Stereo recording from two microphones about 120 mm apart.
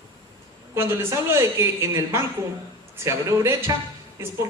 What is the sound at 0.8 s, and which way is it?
A woman's voice, 20° right (ahead or behind).